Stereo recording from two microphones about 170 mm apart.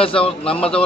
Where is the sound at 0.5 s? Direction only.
5° left (ahead or behind).